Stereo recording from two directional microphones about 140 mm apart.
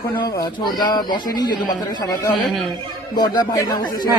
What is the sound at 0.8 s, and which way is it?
Speech, 30° left (ahead or behind).